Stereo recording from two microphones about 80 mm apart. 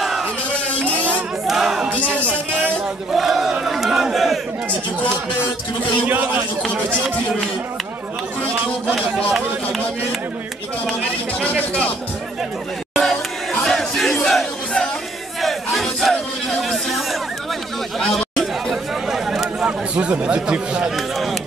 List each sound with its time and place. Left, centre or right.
0.5 s a sound: centre
1.5 s a sound: centre
3.1 s battle cry: centre
6.0 s a man's voice: right
8.9 s speech: centre
10.9 s speech: centre
12.9 s battle cry: centre
16.6 s a sound: centre
17.9 s chatter: centre